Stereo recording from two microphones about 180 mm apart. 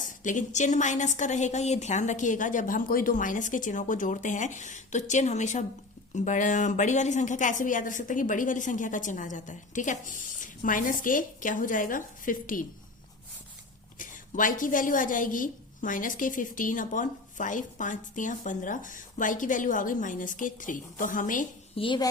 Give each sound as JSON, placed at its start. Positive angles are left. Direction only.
{"t": 0.2, "sound": "a woman's voice", "side_deg": 45}
{"t": 14.0, "sound": "a woman's voice", "side_deg": 50}
{"t": 21.8, "sound": "a woman's voice", "side_deg": 25}